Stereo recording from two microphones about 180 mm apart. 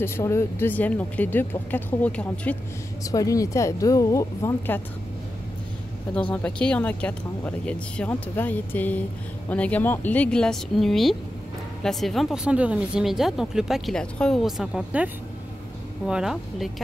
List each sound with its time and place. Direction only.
0.0 s speech: 15° left (ahead or behind)
3.0 s speech: 20° left (ahead or behind)
6.3 s speech: 5° left (ahead or behind)
16.1 s speech: 5° right (ahead or behind)